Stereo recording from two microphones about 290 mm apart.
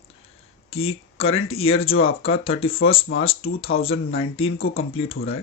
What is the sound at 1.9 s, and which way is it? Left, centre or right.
Speech, left.